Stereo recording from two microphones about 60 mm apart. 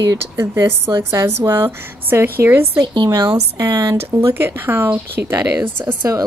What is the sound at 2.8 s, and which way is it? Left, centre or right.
Speech, right.